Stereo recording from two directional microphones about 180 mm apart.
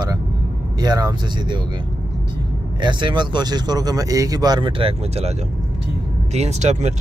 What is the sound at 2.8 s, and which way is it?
Speech, 25° right (ahead or behind).